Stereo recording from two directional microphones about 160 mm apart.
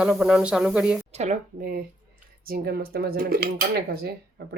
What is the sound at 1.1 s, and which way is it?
Speech, 45° right (ahead or behind).